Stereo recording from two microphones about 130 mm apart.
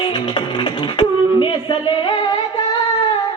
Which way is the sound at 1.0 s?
40° left (ahead or behind).